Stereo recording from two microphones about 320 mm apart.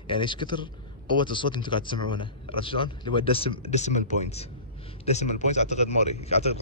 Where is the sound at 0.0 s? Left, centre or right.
Centre.